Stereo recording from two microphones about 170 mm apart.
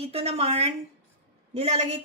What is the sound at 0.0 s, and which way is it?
A woman's voice, 35° right (ahead or behind).